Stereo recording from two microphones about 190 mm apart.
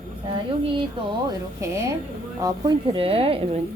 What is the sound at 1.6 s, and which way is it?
A woman's voice, 15° right (ahead or behind).